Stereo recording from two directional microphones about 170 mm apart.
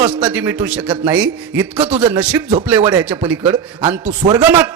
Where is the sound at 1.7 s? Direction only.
30° right (ahead or behind).